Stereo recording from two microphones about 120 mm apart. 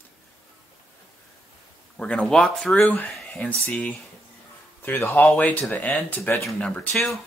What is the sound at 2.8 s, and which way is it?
Speech, 10° left (ahead or behind).